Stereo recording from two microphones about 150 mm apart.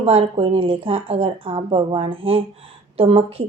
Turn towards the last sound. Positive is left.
turn(degrees=-40)  # may be behind; listen again after turning